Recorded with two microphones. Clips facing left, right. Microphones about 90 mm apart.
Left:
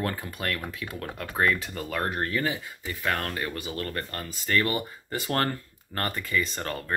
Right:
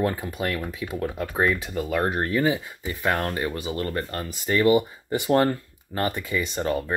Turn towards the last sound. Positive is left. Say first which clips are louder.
# right 4 dB
turn(degrees=-15)  # may be behind; listen again after turning